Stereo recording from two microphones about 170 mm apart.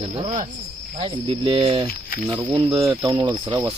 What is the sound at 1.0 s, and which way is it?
Speech, 30° right (ahead or behind).